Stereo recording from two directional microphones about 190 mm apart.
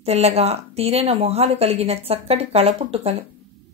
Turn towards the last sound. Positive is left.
turn(degrees=-30)  # may be behind; listen again after turning